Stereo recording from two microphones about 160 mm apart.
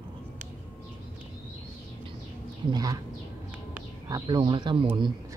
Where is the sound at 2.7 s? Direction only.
25° right (ahead or behind).